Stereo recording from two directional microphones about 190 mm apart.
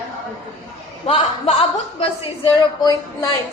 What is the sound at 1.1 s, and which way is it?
A woman's voice, 30° left (ahead or behind).